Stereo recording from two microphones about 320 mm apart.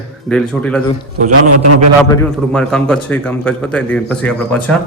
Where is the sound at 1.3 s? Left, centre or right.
Right.